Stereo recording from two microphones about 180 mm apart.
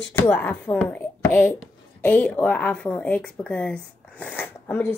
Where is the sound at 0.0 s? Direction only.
10° left (ahead or behind).